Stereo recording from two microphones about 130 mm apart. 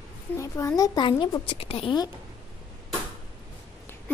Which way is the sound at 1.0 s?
40° left (ahead or behind).